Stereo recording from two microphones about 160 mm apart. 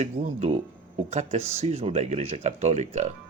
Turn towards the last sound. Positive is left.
turn(degrees=-45)  # may be behind; listen again after turning